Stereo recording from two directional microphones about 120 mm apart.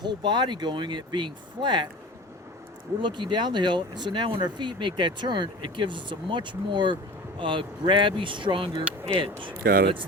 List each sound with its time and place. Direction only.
0.0 s speech: 40° right (ahead or behind)
3.0 s speech: 40° right (ahead or behind)